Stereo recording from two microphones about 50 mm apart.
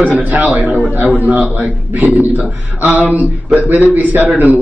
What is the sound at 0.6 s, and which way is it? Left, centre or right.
Speech, left.